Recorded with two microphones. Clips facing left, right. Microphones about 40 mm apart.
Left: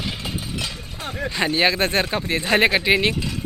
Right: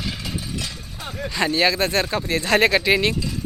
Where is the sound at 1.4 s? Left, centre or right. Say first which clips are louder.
Even; left.